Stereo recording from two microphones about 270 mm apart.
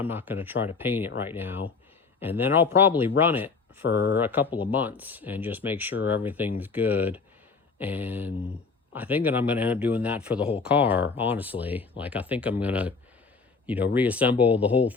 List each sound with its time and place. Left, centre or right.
0.0 s speech: centre
3.8 s speech: left
4.2 s speech: centre
13.9 s speech: centre